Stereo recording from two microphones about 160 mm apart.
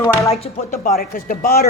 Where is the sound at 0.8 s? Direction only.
60° left (ahead or behind).